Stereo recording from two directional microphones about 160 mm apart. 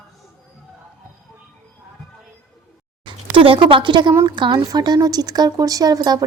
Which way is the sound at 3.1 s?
30° right (ahead or behind).